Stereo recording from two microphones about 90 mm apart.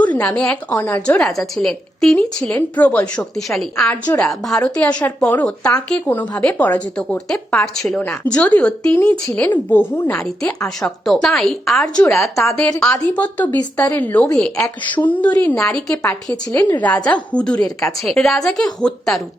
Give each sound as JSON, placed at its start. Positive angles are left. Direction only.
{"t": 0.0, "sound": "a woman's voice", "side_deg": 15}
{"t": 1.3, "sound": "a woman's voice", "side_deg": 5}
{"t": 3.3, "sound": "a woman's voice", "side_deg": 5}
{"t": 4.6, "sound": "a woman's voice", "side_deg": 15}
{"t": 10.1, "sound": "a woman's voice", "side_deg": 5}
{"t": 12.8, "sound": "a woman's voice", "side_deg": 15}
{"t": 15.0, "sound": "a woman's voice", "side_deg": 15}